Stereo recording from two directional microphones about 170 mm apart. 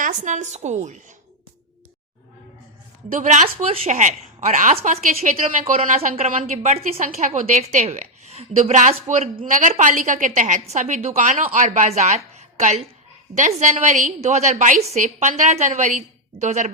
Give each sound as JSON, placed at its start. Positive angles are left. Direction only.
{"t": 0.0, "sound": "a woman's voice", "side_deg": -45}
{"t": 3.1, "sound": "a woman's voice", "side_deg": -45}